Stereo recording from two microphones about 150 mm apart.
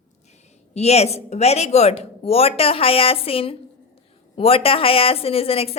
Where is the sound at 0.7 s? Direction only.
45° left (ahead or behind).